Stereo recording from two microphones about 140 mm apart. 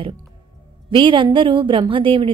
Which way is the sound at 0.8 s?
35° right (ahead or behind).